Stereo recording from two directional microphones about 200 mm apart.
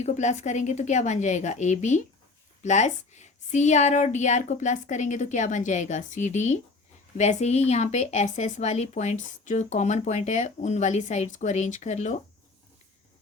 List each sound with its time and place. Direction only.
0.0 s speech: 35° left (ahead or behind)